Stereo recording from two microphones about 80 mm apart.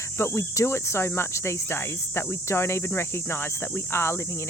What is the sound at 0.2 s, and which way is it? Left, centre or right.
Cricket, left.